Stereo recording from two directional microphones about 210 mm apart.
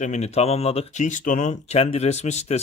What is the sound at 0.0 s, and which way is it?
Speech, 35° left (ahead or behind).